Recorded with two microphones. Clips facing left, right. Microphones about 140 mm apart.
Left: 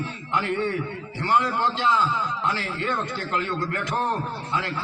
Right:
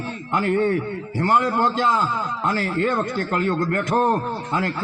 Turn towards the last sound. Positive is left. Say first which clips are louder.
# right 6 dB
turn(degrees=-45)  # may be behind; listen again after turning